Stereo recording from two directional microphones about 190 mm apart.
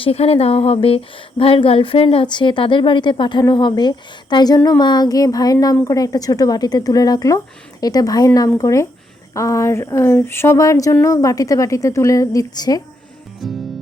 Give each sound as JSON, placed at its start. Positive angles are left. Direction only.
{"t": 0.0, "sound": "speech", "side_deg": 30}
{"t": 13.4, "sound": "music", "side_deg": 0}